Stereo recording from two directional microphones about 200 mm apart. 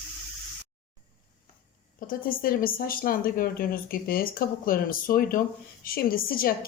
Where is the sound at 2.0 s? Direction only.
45° left (ahead or behind).